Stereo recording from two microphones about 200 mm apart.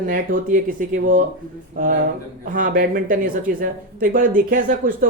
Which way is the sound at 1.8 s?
40° right (ahead or behind).